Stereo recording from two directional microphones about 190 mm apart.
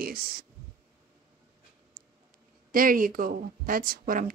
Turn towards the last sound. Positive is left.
turn(degrees=-50)  # may be behind; listen again after turning